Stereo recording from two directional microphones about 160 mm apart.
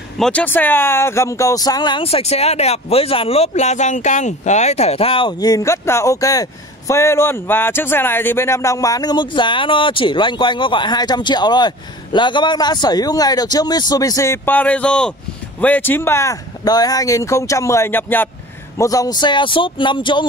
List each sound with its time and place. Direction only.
0.2 s speech: 10° left (ahead or behind); by 20.2 s 30° left (ahead or behind)